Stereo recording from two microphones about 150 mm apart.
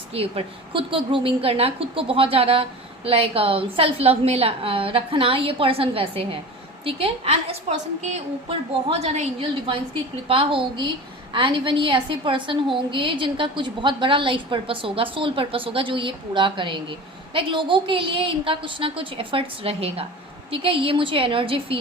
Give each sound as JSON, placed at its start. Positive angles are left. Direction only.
{"t": 0.1, "sound": "a woman's voice", "side_deg": -40}